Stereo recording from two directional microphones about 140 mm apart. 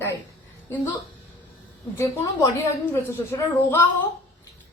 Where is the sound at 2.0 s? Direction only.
20° left (ahead or behind).